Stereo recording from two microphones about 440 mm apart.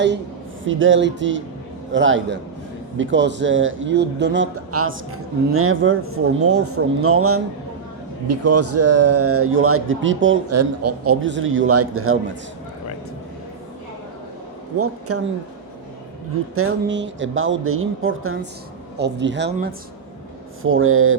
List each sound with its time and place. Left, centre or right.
0.6 s a man's voice: right
14.8 s speech: right
16.6 s a man's voice: right